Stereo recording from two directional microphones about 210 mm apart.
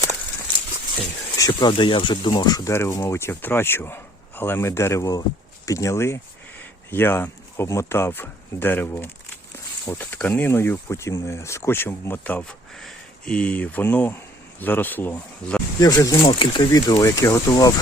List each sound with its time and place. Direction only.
1.4 s speech: 20° left (ahead or behind)
15.8 s speech: 15° left (ahead or behind)